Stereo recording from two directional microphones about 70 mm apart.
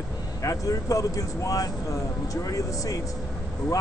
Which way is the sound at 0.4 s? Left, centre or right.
Left.